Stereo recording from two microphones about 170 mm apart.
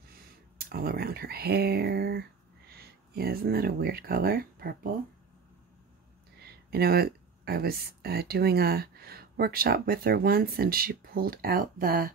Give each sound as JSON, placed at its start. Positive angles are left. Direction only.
{"t": 0.6, "sound": "speech", "side_deg": -65}
{"t": 6.4, "sound": "speech", "side_deg": -65}